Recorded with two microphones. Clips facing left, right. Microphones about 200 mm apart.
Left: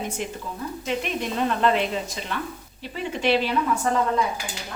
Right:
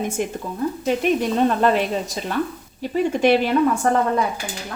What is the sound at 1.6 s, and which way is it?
A woman's voice, 45° right (ahead or behind).